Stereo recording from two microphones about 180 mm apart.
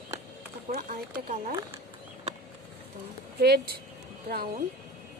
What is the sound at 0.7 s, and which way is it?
Speech, 50° right (ahead or behind).